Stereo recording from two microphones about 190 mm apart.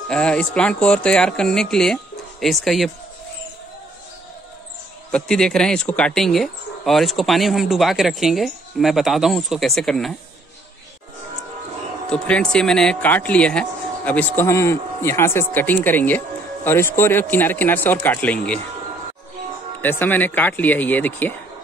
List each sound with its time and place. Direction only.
0.1 s speech: 5° left (ahead or behind)
5.1 s speech: 5° left (ahead or behind)
12.1 s speech: 5° left (ahead or behind)
19.8 s speech: 10° left (ahead or behind)